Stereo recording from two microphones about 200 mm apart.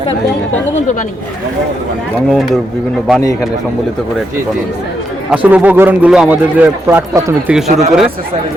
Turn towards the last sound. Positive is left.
turn(degrees=-35)  # may be behind; listen again after turning